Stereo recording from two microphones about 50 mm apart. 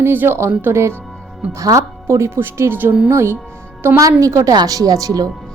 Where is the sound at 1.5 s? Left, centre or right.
Right.